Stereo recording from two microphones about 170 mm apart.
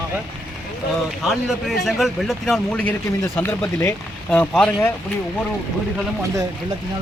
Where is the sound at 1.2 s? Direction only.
Centre (ahead or behind).